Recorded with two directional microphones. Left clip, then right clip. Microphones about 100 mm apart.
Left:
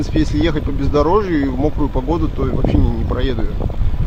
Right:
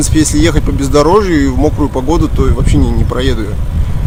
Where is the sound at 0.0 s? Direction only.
20° right (ahead or behind).